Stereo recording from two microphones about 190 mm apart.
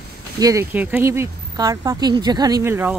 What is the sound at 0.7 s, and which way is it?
Speech, 10° right (ahead or behind).